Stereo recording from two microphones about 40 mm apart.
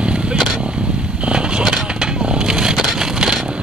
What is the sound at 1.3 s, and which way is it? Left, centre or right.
Vehicle, right.